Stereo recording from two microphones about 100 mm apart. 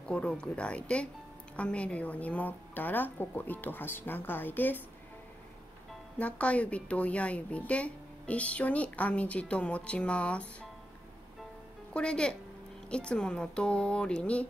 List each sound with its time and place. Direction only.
0.0 s a woman's voice: 10° left (ahead or behind)
6.1 s a woman's voice: 15° left (ahead or behind)
11.9 s a woman's voice: 10° left (ahead or behind)